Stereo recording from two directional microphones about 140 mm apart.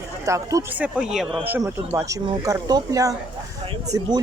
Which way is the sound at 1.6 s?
25° right (ahead or behind).